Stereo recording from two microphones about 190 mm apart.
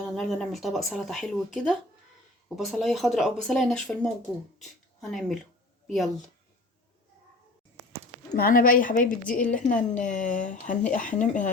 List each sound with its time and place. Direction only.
0.0 s speech: centre (ahead or behind)
8.4 s speech: 50° left (ahead or behind)